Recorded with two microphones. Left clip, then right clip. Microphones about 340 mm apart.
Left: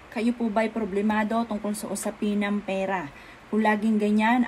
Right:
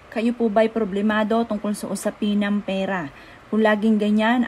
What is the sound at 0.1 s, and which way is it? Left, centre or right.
Speech, right.